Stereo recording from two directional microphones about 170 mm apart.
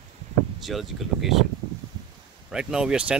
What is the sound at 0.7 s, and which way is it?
Speech, centre (ahead or behind).